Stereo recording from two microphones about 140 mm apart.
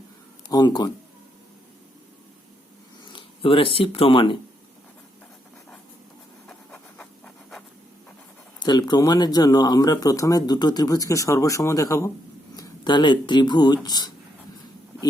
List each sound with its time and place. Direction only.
0.5 s speech: 30° left (ahead or behind)
3.1 s speech: 40° left (ahead or behind)
6.5 s a sound: 5° left (ahead or behind)
8.5 s speech: 30° left (ahead or behind)